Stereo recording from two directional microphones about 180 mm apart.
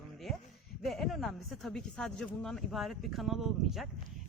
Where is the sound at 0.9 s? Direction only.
Centre (ahead or behind).